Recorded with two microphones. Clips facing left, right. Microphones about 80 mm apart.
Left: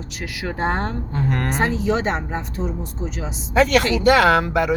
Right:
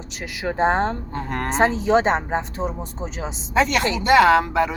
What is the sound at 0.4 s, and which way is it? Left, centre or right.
Speech, right.